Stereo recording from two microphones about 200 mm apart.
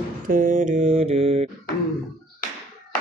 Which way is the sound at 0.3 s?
40° right (ahead or behind).